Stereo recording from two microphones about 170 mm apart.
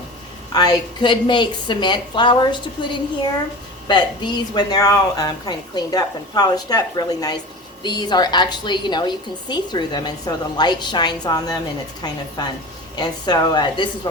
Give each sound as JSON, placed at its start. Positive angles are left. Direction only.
{"t": 0.5, "sound": "a woman's voice", "side_deg": 25}